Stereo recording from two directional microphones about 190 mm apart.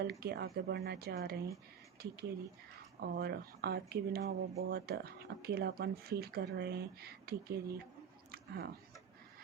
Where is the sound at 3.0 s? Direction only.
55° right (ahead or behind).